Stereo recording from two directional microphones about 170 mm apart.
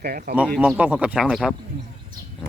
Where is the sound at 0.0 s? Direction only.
60° right (ahead or behind).